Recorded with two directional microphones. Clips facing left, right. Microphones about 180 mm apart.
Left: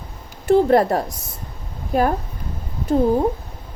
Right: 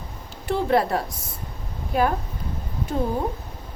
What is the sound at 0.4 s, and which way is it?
Speech, 45° left (ahead or behind).